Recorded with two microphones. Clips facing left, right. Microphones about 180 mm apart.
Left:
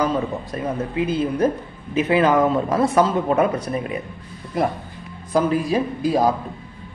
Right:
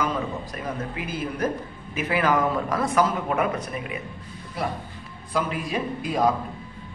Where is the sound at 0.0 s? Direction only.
30° left (ahead or behind).